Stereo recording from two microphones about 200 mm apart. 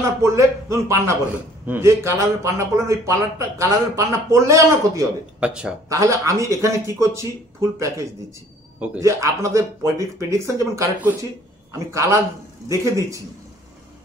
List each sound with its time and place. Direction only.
0.2 s a man's voice: 15° right (ahead or behind)
5.5 s speech: 5° right (ahead or behind)
5.9 s a man's voice: 15° right (ahead or behind)
8.7 s a man's voice: 5° right (ahead or behind)